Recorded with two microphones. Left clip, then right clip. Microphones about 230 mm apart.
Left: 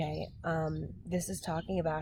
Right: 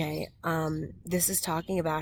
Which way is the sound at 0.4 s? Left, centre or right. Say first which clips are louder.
Right 4 dB; right.